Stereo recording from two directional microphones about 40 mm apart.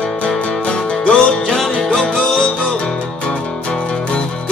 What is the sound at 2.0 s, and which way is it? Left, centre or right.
Music, centre.